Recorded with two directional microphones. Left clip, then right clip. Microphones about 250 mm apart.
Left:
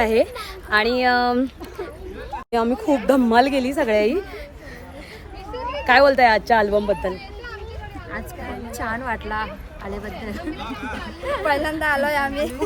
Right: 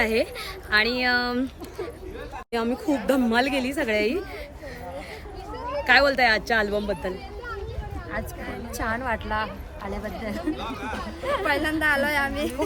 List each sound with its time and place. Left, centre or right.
0.0 s speech: centre
5.8 s speech: centre
8.8 s speech: centre
10.5 s speech: right
11.4 s a woman's voice: centre